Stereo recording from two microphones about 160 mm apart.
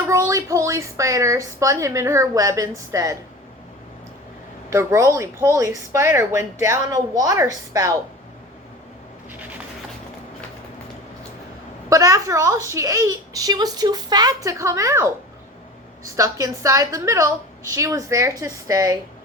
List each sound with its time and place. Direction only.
0.1 s speech: 20° right (ahead or behind)
4.7 s speech: 20° right (ahead or behind)
11.9 s speech: 20° right (ahead or behind)
16.1 s speech: 20° right (ahead or behind)